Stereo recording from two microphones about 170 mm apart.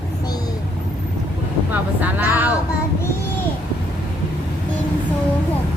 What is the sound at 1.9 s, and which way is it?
Vehicle, 10° right (ahead or behind).